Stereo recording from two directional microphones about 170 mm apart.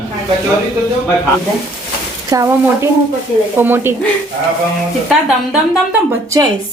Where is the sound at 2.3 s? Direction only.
20° right (ahead or behind).